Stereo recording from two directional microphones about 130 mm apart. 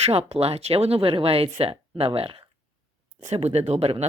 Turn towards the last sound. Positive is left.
turn(degrees=-55)  # may be behind; listen again after turning